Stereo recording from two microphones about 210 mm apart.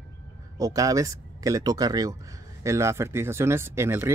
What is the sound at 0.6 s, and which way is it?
Speech, 15° right (ahead or behind).